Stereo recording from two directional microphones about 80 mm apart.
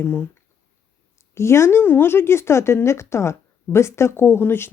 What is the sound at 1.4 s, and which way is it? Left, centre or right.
Speech, left.